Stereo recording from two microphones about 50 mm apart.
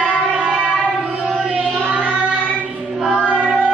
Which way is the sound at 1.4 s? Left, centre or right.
Centre.